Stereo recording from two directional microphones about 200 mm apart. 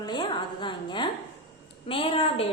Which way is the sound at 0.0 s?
20° left (ahead or behind).